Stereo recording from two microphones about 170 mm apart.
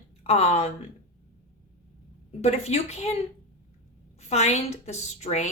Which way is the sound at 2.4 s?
40° left (ahead or behind).